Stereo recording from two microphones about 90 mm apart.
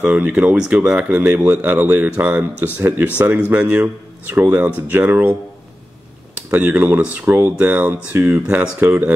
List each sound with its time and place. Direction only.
0.0 s a man's voice: 15° right (ahead or behind)
6.5 s a man's voice: 20° right (ahead or behind)